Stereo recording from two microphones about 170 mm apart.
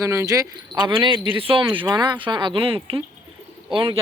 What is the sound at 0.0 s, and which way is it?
Speech, 15° right (ahead or behind).